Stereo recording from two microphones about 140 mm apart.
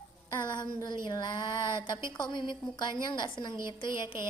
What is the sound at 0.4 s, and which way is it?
A woman's voice, 30° left (ahead or behind).